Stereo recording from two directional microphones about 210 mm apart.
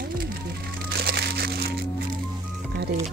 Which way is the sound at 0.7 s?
50° right (ahead or behind).